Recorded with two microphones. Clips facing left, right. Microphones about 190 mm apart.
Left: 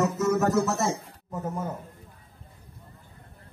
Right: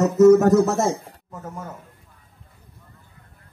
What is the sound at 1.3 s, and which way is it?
Speech, 20° left (ahead or behind).